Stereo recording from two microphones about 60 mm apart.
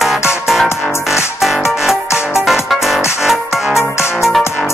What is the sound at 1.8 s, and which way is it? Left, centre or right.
Music, centre.